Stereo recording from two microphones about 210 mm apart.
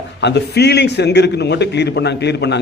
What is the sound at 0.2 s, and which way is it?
A man's voice, 55° left (ahead or behind).